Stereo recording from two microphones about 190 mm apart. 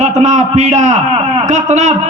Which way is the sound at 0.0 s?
40° right (ahead or behind).